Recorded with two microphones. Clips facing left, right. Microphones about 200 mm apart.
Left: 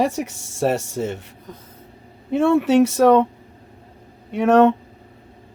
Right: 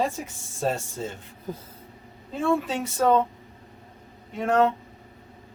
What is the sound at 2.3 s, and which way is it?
Speech, 75° left (ahead or behind).